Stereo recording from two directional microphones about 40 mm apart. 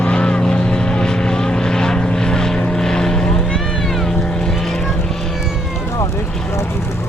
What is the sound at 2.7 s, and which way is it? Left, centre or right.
Boat, centre.